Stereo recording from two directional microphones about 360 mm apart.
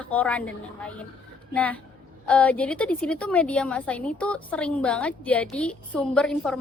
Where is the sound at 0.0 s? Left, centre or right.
Centre.